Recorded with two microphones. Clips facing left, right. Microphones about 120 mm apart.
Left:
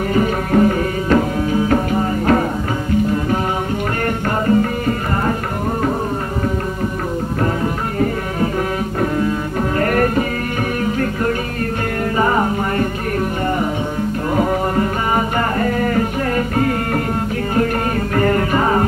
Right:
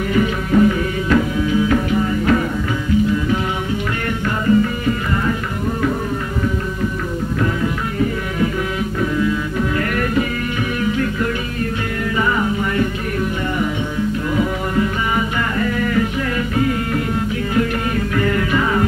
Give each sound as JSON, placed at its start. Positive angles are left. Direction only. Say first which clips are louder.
{"t": 0.1, "sound": "music", "louder": "even", "side_deg": 40}
{"t": 9.0, "sound": "music", "louder": "even", "side_deg": 45}
{"t": 12.2, "sound": "music", "louder": "left 2 dB", "side_deg": 40}
{"t": 14.3, "sound": "music", "louder": "left 5 dB", "side_deg": 45}
{"t": 18.1, "sound": "music", "louder": "left 3 dB", "side_deg": 45}